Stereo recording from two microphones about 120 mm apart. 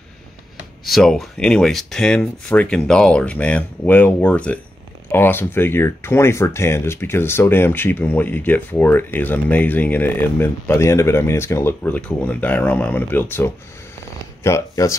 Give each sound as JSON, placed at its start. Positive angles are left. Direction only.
{"t": 0.8, "sound": "speech", "side_deg": 0}